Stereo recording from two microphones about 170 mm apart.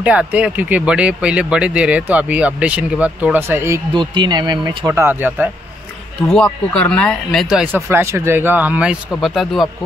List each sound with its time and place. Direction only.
0.0 s speech: 5° right (ahead or behind)
3.9 s speech: 30° right (ahead or behind); by 5.5 s 10° right (ahead or behind)
6.3 s speech: 5° left (ahead or behind)